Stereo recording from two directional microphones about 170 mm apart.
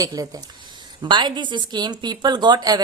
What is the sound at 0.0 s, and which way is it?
Speech, 20° right (ahead or behind).